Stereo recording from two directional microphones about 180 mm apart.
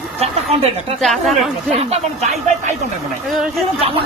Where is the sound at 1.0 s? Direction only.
Centre (ahead or behind).